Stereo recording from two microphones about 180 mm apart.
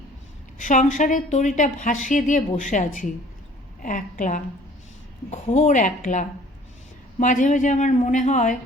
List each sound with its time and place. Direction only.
0.6 s a woman's voice: 45° left (ahead or behind)